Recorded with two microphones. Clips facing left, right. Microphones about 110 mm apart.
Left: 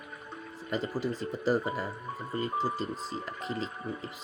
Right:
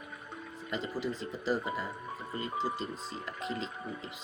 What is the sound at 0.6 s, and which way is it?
Speech, 40° left (ahead or behind).